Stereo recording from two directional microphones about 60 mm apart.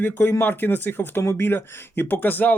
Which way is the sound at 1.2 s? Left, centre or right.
Left.